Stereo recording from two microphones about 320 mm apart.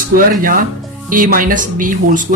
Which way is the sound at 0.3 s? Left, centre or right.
Right.